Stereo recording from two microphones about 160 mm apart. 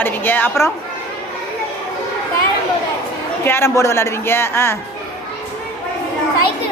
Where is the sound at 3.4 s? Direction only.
15° left (ahead or behind).